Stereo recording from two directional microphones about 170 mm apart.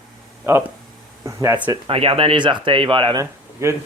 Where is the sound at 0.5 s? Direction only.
15° right (ahead or behind).